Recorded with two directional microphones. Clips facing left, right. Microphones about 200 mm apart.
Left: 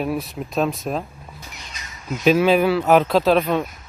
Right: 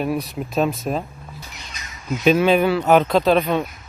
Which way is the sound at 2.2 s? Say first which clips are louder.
Even; centre (ahead or behind).